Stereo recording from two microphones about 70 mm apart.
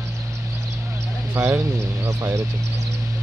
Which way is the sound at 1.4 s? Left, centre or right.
Right.